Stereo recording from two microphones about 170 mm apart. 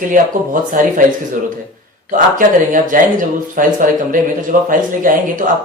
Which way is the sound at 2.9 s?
50° right (ahead or behind).